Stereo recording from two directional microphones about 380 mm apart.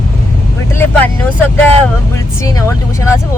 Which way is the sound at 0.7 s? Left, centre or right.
Centre.